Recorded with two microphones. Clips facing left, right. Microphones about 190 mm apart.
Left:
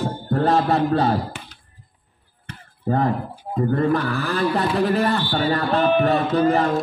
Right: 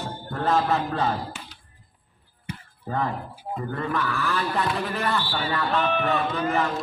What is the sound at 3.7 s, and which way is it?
Speech, 35° left (ahead or behind).